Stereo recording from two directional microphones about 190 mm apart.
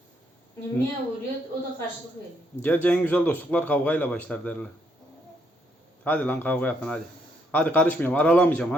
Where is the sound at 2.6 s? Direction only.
10° left (ahead or behind).